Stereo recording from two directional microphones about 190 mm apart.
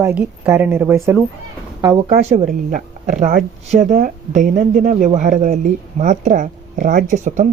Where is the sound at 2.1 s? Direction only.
35° right (ahead or behind).